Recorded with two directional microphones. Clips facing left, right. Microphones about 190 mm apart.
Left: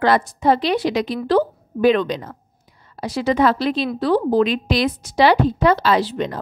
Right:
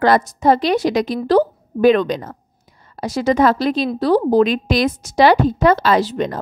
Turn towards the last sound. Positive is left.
turn(degrees=-45)  # may be behind; listen again after turning